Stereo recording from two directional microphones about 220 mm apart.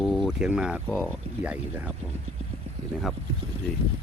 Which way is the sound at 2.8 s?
30° right (ahead or behind).